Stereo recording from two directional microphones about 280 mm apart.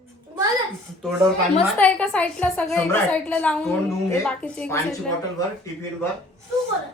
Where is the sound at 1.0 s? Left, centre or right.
Centre.